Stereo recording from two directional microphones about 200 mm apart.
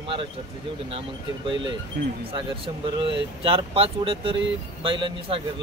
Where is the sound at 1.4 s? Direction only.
25° right (ahead or behind).